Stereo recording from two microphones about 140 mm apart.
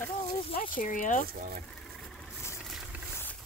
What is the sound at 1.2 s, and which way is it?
Speech, 90° right.